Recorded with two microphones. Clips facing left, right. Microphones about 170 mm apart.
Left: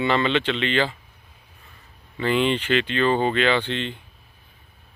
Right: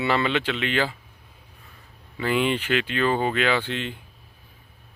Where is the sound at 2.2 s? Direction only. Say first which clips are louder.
Left 2 dB; 10° right (ahead or behind).